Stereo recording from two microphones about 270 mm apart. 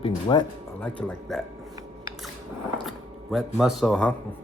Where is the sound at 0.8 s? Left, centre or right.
Centre.